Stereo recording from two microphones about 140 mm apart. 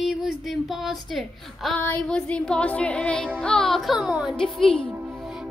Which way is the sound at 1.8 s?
10° left (ahead or behind).